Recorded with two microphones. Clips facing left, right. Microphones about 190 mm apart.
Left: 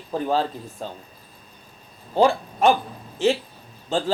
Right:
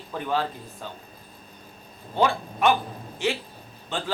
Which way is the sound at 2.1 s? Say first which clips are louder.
Left 5 dB; 35° left (ahead or behind).